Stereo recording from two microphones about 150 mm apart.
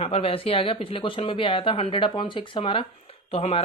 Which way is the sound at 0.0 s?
40° left (ahead or behind).